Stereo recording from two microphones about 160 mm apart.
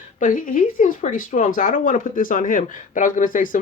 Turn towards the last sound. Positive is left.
turn(degrees=55)  # may be behind; listen again after turning